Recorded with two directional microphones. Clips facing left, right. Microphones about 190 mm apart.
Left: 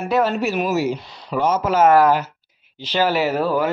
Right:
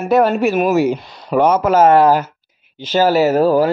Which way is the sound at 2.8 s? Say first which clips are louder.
Right 6 dB; 45° right (ahead or behind).